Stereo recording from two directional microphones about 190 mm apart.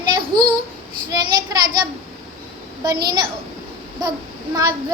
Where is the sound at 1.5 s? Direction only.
20° right (ahead or behind).